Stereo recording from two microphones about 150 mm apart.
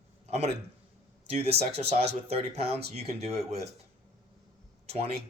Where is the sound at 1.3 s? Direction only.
45° right (ahead or behind).